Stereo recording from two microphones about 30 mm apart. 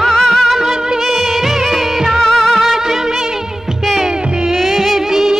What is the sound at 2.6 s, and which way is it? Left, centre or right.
Music, centre.